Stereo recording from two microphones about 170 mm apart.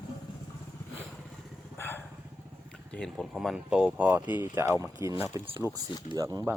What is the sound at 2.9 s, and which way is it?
Speech, 5° left (ahead or behind).